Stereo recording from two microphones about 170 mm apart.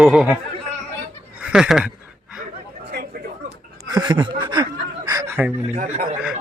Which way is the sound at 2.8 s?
65° right (ahead or behind).